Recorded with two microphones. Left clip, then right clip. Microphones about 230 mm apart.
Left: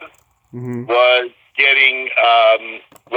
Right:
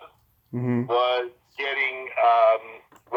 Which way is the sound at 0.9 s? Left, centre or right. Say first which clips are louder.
Left 11 dB; left.